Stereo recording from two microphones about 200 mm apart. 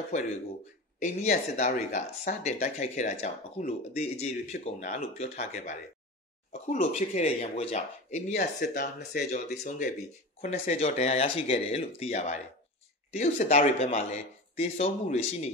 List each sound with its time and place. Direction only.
0.1 s speech: 35° left (ahead or behind)
8.5 s speech: 50° left (ahead or behind); by 15.5 s 35° left (ahead or behind)